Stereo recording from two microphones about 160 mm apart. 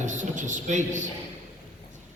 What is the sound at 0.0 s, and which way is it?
Speech, 50° right (ahead or behind).